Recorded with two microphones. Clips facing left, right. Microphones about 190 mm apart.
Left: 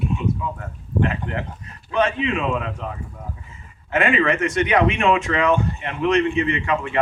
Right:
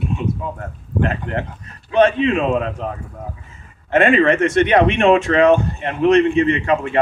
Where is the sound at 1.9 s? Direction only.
35° right (ahead or behind).